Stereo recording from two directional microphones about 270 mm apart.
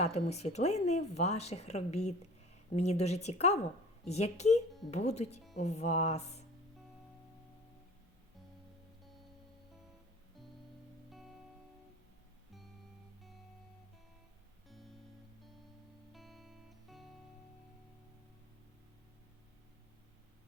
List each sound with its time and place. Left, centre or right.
0.0 s speech: left
11.1 s music: centre
14.7 s music: centre
16.1 s music: centre